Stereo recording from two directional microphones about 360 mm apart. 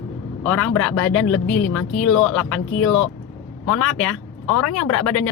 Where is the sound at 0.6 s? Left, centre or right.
Left.